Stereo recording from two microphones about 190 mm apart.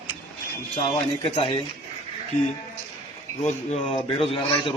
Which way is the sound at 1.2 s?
30° left (ahead or behind).